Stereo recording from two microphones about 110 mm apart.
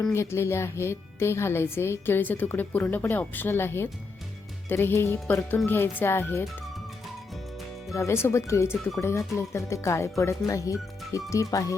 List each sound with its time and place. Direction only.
0.1 s speech: 25° left (ahead or behind)
7.9 s speech: 25° left (ahead or behind)